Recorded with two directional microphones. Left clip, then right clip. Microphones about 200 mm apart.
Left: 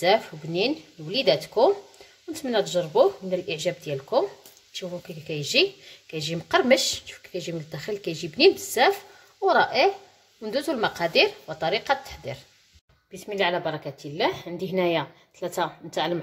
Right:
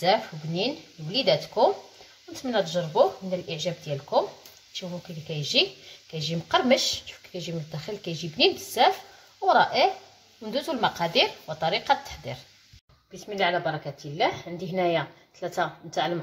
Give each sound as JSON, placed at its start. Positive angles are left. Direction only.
{"t": 0.0, "sound": "a woman's voice", "side_deg": 30}
{"t": 5.3, "sound": "a woman's voice", "side_deg": 25}